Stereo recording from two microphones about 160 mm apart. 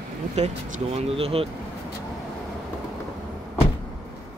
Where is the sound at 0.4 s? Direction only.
40° right (ahead or behind).